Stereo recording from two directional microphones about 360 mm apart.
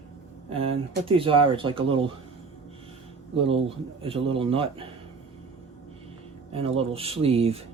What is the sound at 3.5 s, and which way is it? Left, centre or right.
Speech, centre.